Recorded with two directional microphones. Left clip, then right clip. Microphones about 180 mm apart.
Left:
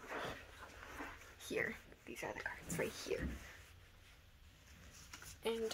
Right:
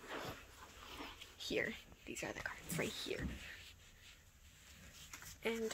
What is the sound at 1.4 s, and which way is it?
Speech, 55° right (ahead or behind).